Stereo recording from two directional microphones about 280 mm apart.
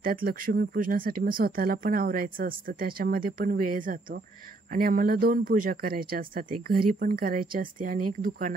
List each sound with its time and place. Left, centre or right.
0.0 s speech: right